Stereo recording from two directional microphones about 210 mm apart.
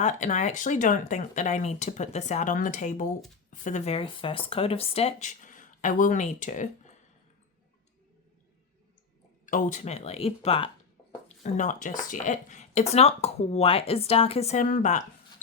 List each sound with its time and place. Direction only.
0.0 s speech: 35° left (ahead or behind)
9.5 s speech: 35° left (ahead or behind)